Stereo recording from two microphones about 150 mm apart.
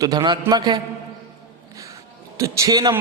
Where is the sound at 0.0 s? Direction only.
30° right (ahead or behind).